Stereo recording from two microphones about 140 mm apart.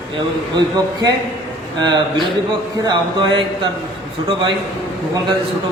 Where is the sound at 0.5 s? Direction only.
30° right (ahead or behind).